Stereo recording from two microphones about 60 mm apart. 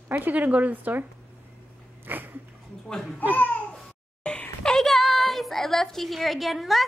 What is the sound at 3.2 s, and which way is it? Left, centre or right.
Speech, left.